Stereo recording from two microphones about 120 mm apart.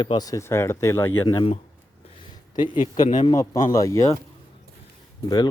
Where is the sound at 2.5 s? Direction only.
35° left (ahead or behind).